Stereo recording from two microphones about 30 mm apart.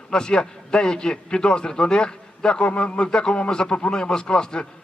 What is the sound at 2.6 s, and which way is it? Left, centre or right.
A man's voice, left.